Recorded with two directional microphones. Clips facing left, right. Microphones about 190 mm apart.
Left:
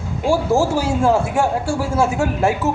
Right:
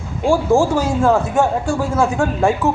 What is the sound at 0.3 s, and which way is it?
A man's voice, 10° left (ahead or behind).